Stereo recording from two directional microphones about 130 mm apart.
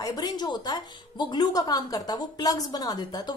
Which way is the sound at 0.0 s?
30° left (ahead or behind).